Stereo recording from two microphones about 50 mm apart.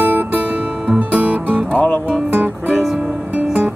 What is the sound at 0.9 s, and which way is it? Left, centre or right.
Music, right.